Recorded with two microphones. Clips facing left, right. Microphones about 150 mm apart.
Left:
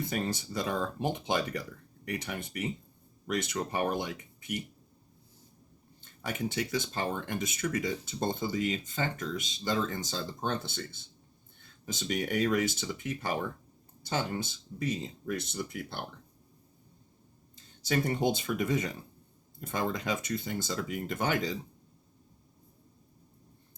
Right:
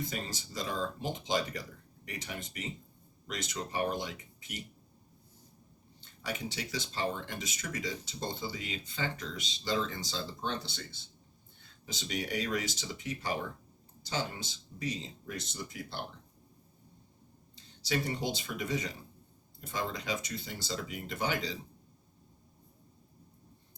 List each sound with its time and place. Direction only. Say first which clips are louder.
0.0 s speech: left 6 dB; 60° left (ahead or behind)
6.0 s speech: left 4 dB; 50° left (ahead or behind)
17.8 s speech: left 5 dB; 50° left (ahead or behind)